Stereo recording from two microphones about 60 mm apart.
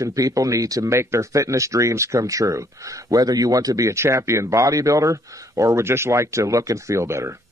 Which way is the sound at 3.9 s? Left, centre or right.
Right.